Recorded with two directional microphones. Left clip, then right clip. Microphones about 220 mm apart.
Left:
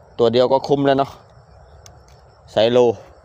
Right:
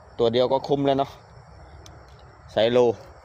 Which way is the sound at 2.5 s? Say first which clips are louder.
Left 5 dB; 25° left (ahead or behind).